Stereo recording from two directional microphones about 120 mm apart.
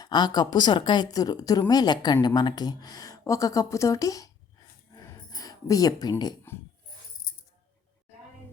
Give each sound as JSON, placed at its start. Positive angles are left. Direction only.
{"t": 0.0, "sound": "a woman's voice", "side_deg": 40}
{"t": 5.3, "sound": "speech", "side_deg": 30}